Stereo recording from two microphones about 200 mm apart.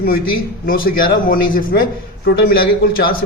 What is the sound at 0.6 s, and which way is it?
A man's voice, 45° left (ahead or behind).